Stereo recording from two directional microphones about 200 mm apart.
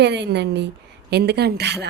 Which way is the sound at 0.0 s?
60° right (ahead or behind).